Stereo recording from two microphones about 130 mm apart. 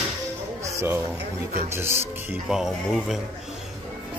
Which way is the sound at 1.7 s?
20° right (ahead or behind).